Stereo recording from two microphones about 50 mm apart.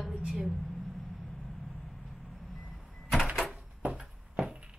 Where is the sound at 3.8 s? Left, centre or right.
Centre.